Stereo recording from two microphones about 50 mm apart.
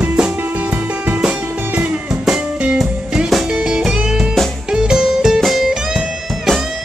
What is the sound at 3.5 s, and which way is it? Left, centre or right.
Music, centre.